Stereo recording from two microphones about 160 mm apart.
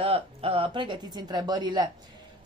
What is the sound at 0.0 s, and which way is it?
A woman's voice, 35° right (ahead or behind).